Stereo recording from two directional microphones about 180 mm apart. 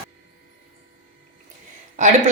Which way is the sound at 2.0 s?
45° right (ahead or behind).